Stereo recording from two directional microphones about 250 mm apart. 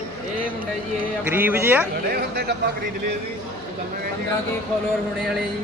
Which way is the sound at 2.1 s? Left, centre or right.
Right.